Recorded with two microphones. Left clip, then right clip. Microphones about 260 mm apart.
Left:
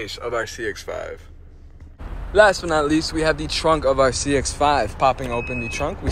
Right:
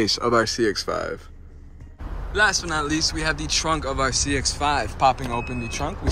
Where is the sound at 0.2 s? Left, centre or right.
Right.